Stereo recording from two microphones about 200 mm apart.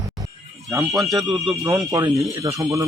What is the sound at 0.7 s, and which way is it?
Speech, 5° right (ahead or behind).